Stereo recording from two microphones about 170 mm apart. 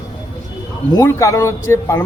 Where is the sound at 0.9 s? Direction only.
15° left (ahead or behind).